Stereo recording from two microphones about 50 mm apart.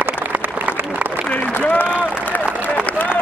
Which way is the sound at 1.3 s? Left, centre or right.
Left.